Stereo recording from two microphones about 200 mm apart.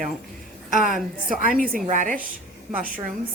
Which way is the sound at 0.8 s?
40° right (ahead or behind).